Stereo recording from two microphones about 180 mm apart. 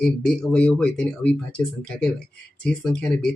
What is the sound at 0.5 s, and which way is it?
Speech, 5° left (ahead or behind).